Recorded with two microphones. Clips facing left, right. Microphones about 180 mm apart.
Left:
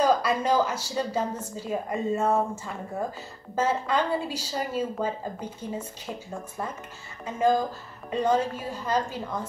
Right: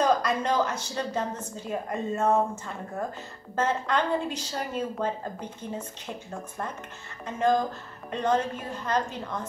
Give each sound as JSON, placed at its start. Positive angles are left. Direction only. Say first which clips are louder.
{"t": 0.0, "sound": "a woman's voice", "louder": "left 1 dB", "side_deg": 5}